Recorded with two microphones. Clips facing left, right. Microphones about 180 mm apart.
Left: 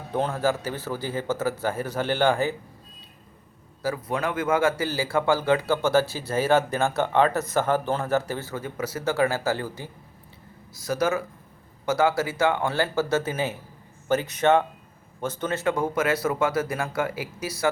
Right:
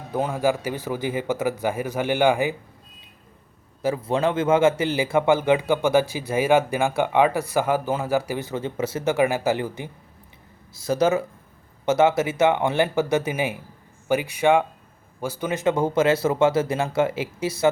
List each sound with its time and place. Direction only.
0.1 s speech: 10° right (ahead or behind)
3.8 s speech: 25° right (ahead or behind)